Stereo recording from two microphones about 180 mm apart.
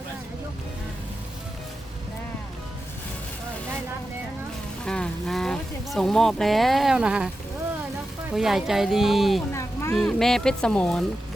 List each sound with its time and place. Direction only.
4.9 s speech: 5° left (ahead or behind)
8.3 s speech: centre (ahead or behind)
9.5 s vehicle: 15° left (ahead or behind)
9.9 s speech: centre (ahead or behind)